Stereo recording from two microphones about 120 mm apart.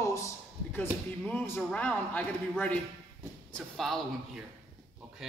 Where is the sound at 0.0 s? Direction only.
25° left (ahead or behind).